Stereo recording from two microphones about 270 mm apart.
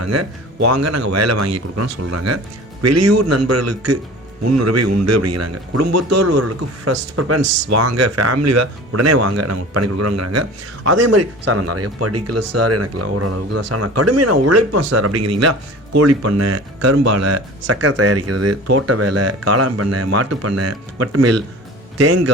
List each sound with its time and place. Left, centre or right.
0.0 s a man's voice: right
6.8 s speech: right